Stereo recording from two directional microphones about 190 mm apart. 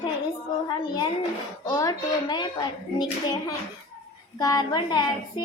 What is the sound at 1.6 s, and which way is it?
Child singing, 20° left (ahead or behind).